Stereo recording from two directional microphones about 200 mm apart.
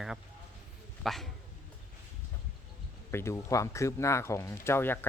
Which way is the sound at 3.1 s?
15° left (ahead or behind).